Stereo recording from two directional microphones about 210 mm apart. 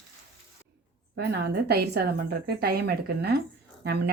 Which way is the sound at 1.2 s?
50° right (ahead or behind).